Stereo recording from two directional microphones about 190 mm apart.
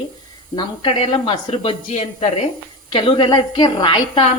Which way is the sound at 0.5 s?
30° left (ahead or behind).